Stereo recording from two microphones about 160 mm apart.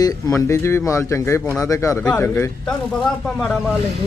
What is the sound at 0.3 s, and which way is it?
Speech, 15° left (ahead or behind).